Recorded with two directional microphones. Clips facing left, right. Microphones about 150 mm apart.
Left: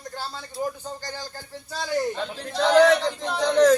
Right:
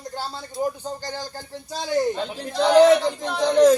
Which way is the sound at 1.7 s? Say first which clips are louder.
Right 3 dB; 20° right (ahead or behind).